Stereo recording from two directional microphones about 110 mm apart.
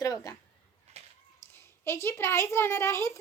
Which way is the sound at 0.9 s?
75° right (ahead or behind).